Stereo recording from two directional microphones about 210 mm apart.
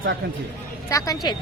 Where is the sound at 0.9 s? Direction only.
15° left (ahead or behind).